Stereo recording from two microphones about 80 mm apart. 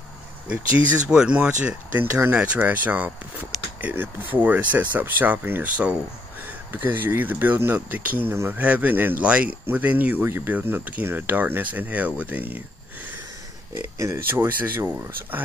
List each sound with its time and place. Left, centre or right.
0.5 s speech: centre
2.0 s speech: right
13.7 s speech: right